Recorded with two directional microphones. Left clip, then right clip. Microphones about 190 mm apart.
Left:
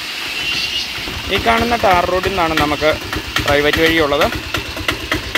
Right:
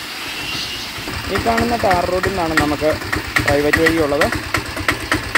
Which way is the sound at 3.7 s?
20° left (ahead or behind).